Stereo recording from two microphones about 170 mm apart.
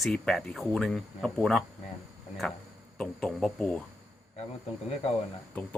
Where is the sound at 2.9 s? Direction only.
5° left (ahead or behind).